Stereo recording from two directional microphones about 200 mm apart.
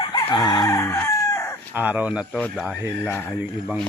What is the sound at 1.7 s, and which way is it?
Speech, 10° right (ahead or behind).